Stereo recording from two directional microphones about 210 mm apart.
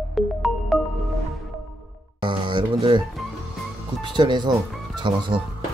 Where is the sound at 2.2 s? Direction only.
25° right (ahead or behind).